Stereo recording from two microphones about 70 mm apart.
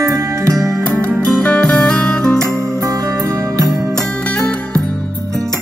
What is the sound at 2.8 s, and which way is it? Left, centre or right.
Music, right.